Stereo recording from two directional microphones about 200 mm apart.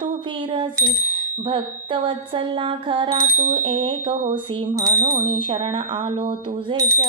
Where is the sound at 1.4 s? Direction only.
25° right (ahead or behind).